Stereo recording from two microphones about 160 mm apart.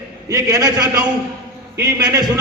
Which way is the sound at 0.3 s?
20° right (ahead or behind).